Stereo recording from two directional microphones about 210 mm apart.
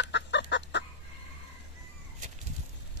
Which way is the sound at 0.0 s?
55° left (ahead or behind).